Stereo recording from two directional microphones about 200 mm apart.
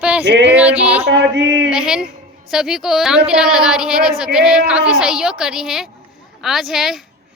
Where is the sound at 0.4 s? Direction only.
5° right (ahead or behind).